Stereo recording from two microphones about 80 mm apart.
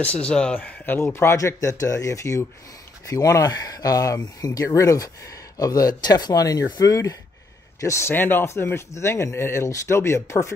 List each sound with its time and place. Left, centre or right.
0.0 s speech: centre
0.8 s speech: left
8.1 s speech: left